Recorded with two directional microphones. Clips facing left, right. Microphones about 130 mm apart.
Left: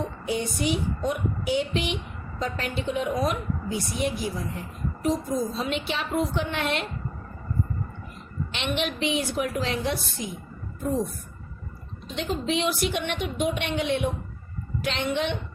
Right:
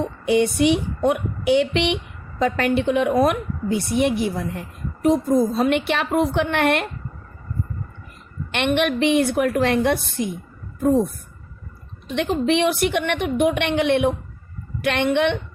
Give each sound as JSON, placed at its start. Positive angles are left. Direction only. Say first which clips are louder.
{"t": 0.3, "sound": "a woman's voice", "louder": "right 10 dB", "side_deg": -70}
{"t": 8.5, "sound": "a woman's voice", "louder": "right 9 dB", "side_deg": -60}
{"t": 12.0, "sound": "a woman's voice", "louder": "right 8 dB", "side_deg": -65}